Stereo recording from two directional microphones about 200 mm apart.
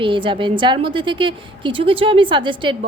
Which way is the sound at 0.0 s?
25° right (ahead or behind).